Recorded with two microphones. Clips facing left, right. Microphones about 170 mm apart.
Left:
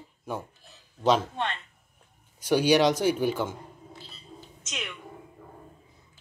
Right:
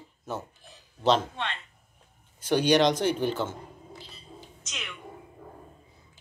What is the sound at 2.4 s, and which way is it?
Speech, 10° left (ahead or behind).